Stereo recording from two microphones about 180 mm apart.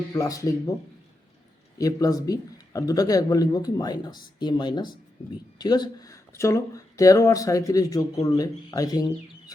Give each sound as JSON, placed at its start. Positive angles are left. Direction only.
{"t": 0.1, "sound": "speech", "side_deg": 20}
{"t": 1.8, "sound": "speech", "side_deg": 20}